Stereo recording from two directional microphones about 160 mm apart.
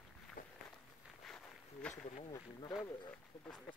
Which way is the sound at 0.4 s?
60° left (ahead or behind).